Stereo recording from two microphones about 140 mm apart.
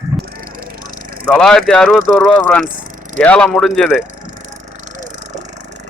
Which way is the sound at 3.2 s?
10° left (ahead or behind).